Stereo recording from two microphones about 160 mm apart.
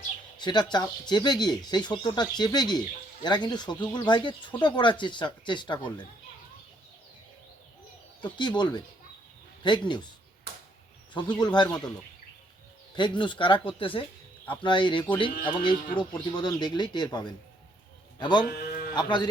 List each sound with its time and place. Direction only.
0.3 s speech: 25° left (ahead or behind)
8.2 s speech: 30° left (ahead or behind)
11.3 s speech: 25° left (ahead or behind)
13.0 s a man's voice: 30° left (ahead or behind)
18.4 s livestock: 85° left
18.9 s speech: 30° left (ahead or behind)